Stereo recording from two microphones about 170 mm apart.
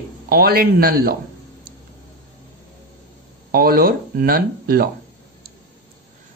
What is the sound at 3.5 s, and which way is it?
Speech, 60° right (ahead or behind).